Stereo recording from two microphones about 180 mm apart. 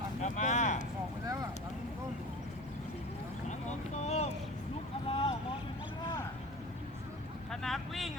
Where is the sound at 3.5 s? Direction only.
35° left (ahead or behind).